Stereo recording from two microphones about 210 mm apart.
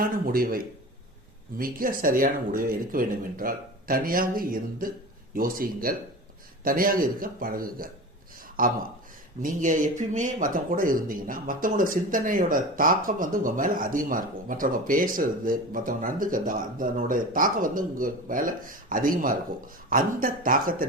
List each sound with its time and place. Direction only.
0.0 s speech: 45° right (ahead or behind)